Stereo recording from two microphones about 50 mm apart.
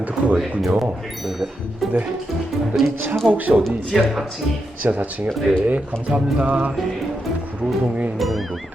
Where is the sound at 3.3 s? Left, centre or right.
Right.